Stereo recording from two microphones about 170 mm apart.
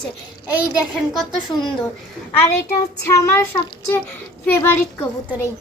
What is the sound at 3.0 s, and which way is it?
Child singing, 15° left (ahead or behind).